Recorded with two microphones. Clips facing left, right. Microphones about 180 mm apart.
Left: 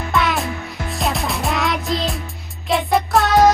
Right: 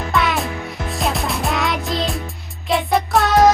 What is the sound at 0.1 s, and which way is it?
Music, centre (ahead or behind).